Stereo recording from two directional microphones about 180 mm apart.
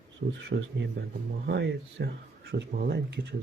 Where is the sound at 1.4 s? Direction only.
65° right (ahead or behind).